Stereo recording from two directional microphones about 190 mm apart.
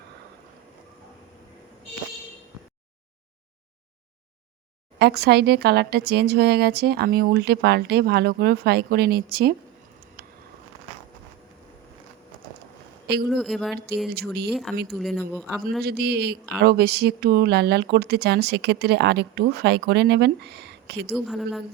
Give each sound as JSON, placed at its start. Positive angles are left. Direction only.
{"t": 4.9, "sound": "speech", "side_deg": -60}
{"t": 10.2, "sound": "a sound", "side_deg": -50}
{"t": 13.3, "sound": "a man's voice", "side_deg": 0}
{"t": 14.1, "sound": "speech", "side_deg": -55}
{"t": 14.5, "sound": "a man's voice", "side_deg": 0}
{"t": 15.8, "sound": "speech", "side_deg": -55}
{"t": 21.1, "sound": "a man's voice", "side_deg": 0}